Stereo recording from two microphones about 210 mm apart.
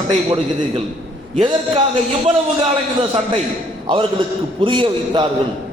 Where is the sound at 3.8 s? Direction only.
25° right (ahead or behind).